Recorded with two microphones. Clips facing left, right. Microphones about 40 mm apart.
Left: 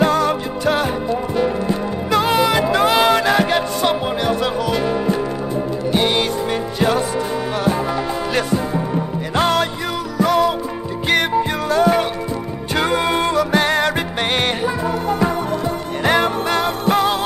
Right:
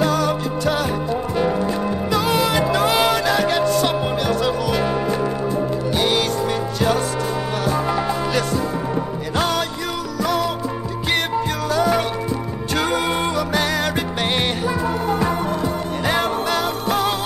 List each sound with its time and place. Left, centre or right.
0.0 s music: left
2.1 s music: left
5.9 s music: centre
8.3 s music: centre
11.7 s music: left
13.5 s music: left
16.0 s music: left